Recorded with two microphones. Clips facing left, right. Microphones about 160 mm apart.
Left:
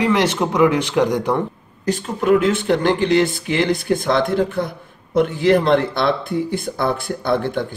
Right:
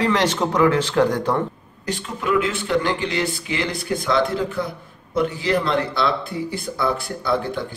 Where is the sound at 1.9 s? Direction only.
50° left (ahead or behind).